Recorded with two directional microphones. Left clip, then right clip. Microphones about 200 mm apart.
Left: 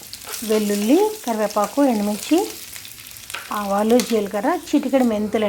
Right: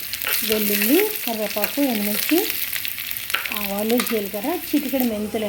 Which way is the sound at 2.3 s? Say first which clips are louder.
Left 2 dB; centre (ahead or behind).